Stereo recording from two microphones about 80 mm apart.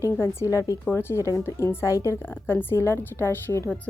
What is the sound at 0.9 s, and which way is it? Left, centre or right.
A woman's voice, left.